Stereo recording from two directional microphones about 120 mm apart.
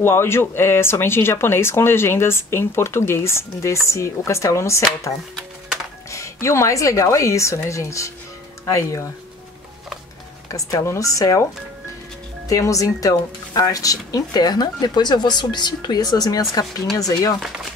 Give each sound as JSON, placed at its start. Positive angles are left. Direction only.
{"t": 0.0, "sound": "speech", "side_deg": 20}
{"t": 6.0, "sound": "speech", "side_deg": 25}
{"t": 10.5, "sound": "speech", "side_deg": 30}
{"t": 12.4, "sound": "speech", "side_deg": 30}